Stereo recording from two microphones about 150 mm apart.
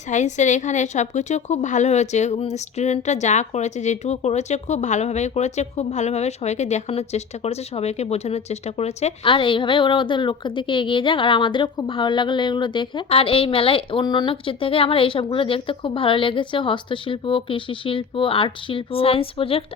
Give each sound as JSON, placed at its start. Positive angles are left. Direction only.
{"t": 0.1, "sound": "a woman's voice", "side_deg": 55}